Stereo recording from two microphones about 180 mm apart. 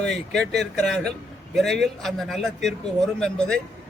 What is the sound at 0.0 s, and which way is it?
A man's voice, centre (ahead or behind).